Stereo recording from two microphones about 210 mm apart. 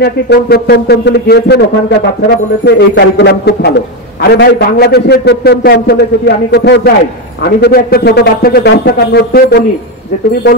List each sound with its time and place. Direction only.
0.0 s speech: 50° left (ahead or behind)